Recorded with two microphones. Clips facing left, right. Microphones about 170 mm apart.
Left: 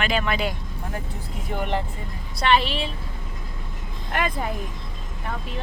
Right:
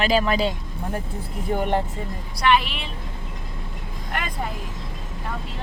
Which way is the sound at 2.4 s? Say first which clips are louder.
Even; 30° left (ahead or behind).